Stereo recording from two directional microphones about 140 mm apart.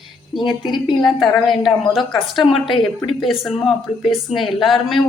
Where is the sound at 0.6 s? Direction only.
35° left (ahead or behind).